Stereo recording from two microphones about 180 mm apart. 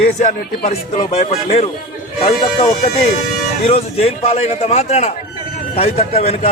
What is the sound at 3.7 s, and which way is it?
A man's voice, 35° left (ahead or behind).